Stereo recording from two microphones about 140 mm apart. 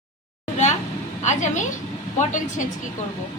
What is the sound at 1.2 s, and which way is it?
Speech, 60° left (ahead or behind).